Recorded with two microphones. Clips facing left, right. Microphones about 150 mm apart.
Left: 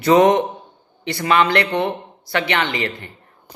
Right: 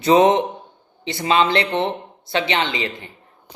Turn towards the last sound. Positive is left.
turn(degrees=-20)  # may be behind; listen again after turning